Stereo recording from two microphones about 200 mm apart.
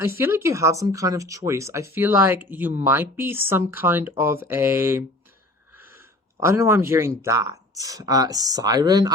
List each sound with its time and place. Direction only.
0.0 s speech: 10° right (ahead or behind)
6.4 s speech: 15° right (ahead or behind)